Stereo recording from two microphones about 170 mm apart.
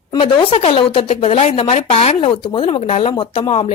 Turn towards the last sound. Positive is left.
turn(degrees=35)  # may be behind; listen again after turning